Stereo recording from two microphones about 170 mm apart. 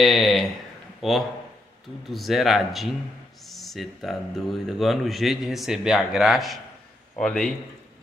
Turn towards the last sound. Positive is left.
turn(degrees=5)  # may be behind; listen again after turning